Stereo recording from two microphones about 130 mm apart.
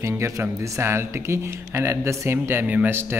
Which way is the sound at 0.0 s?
20° right (ahead or behind).